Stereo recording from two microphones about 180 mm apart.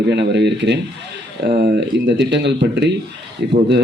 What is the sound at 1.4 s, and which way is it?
Speech, 60° right (ahead or behind).